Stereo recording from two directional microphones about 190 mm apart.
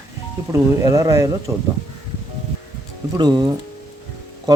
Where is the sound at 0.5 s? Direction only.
20° right (ahead or behind).